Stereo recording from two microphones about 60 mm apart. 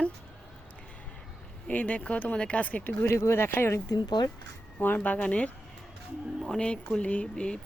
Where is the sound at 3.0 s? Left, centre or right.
Left.